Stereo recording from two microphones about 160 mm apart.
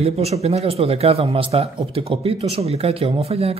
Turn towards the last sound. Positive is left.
turn(degrees=-40)  # may be behind; listen again after turning